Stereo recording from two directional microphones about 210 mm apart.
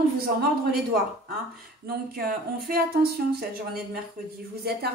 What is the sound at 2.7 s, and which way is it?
Speech, 45° right (ahead or behind).